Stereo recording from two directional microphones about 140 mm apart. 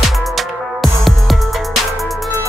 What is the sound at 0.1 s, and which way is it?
Music, centre (ahead or behind).